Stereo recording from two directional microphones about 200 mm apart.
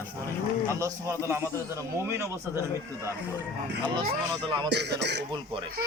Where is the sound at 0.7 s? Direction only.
15° right (ahead or behind).